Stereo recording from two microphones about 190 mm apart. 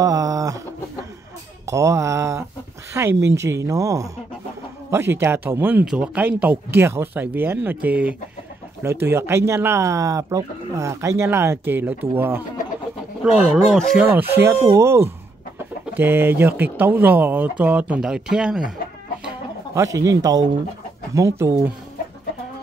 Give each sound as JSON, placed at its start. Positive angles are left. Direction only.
{"t": 0.0, "sound": "a sound", "side_deg": -20}
{"t": 1.7, "sound": "speech", "side_deg": -15}
{"t": 19.7, "sound": "speech", "side_deg": -15}